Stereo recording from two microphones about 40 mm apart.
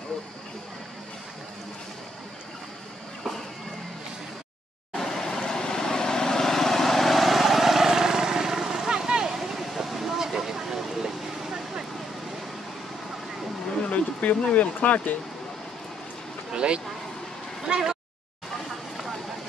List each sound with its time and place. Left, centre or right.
4.9 s vehicle: centre
9.3 s a sound: centre
13.8 s bee: left
14.5 s speech: left
16.5 s speech: right
17.7 s a sound: right